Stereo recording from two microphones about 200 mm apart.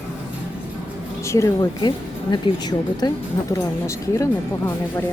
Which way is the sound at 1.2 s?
15° left (ahead or behind).